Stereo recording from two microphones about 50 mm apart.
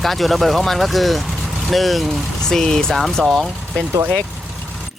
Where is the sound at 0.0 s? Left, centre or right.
Centre.